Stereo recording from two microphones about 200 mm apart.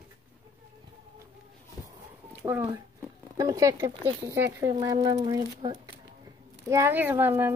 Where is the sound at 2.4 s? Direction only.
10° right (ahead or behind).